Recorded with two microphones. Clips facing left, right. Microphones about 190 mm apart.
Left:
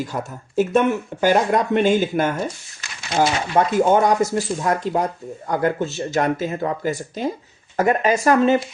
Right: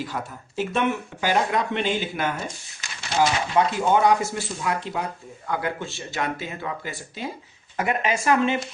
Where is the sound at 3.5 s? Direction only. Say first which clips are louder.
Left 5 dB; 45° left (ahead or behind).